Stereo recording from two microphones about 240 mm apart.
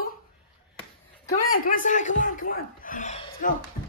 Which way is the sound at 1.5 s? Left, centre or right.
Left.